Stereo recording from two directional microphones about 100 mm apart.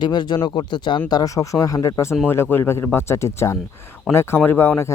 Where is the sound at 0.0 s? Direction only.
50° left (ahead or behind).